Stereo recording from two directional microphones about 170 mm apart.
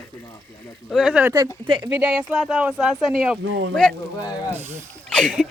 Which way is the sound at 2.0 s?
10° right (ahead or behind).